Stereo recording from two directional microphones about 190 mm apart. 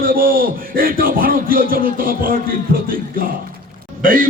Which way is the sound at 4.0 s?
45° right (ahead or behind).